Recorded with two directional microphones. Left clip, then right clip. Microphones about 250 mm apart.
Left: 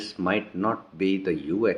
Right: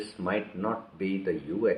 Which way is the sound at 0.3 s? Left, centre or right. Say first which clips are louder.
Left 5 dB; left.